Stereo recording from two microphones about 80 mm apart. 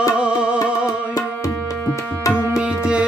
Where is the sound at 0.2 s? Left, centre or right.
Centre.